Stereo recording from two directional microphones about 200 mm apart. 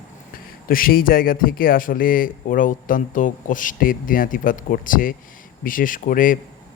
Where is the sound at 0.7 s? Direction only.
45° left (ahead or behind).